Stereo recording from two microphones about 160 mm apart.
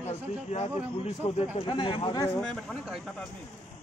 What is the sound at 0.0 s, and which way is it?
A man's voice, 45° left (ahead or behind).